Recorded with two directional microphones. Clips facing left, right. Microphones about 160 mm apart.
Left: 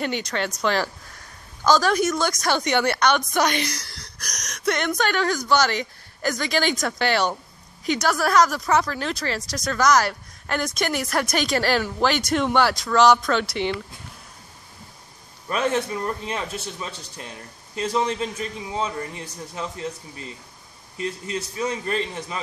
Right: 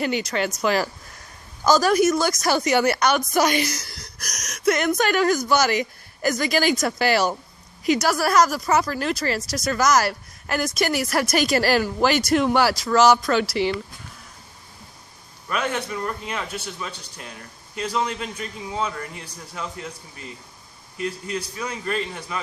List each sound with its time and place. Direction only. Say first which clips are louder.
0.0 s speech: right 2 dB; 5° right (ahead or behind)
15.4 s a man's voice: left 3 dB; 30° left (ahead or behind)
21.0 s a man's voice: right 1 dB; 30° left (ahead or behind)